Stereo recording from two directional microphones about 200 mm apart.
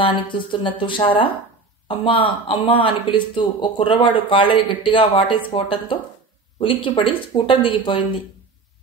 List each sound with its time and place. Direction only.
0.0 s speech: 25° left (ahead or behind)